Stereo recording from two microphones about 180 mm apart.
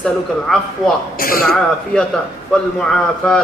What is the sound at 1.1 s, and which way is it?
Speech, 55° left (ahead or behind).